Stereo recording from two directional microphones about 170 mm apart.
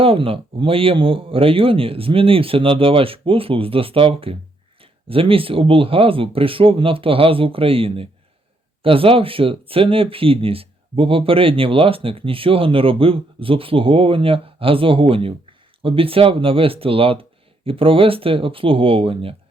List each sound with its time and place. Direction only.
0.0 s speech: 35° right (ahead or behind)